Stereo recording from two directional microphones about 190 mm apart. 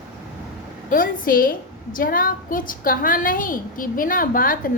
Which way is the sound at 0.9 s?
45° left (ahead or behind).